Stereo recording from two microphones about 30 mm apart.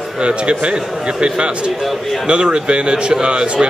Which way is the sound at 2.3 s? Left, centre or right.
Right.